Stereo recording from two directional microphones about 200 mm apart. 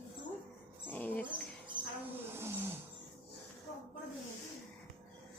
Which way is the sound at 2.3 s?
10° right (ahead or behind).